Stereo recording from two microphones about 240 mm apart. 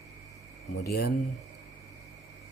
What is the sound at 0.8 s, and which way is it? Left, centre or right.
Speech, left.